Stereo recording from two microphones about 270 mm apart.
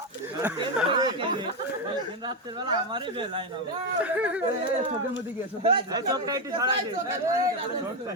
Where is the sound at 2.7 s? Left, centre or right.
Centre.